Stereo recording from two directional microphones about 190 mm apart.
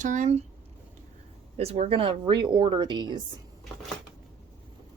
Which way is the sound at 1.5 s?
35° right (ahead or behind).